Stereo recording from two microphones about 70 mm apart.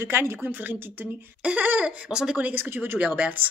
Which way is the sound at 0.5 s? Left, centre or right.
Right.